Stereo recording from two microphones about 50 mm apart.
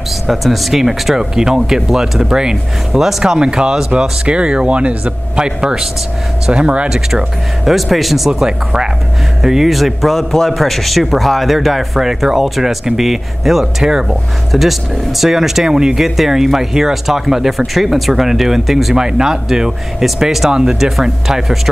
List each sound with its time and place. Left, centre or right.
0.3 s speech: centre; by 6.9 s right
6.9 s a man's voice: centre
8.3 s a man's voice: centre